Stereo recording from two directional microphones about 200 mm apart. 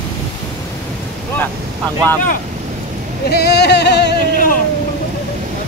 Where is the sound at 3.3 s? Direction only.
55° left (ahead or behind).